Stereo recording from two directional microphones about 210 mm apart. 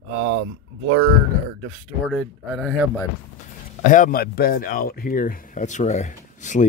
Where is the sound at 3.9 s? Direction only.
40° left (ahead or behind).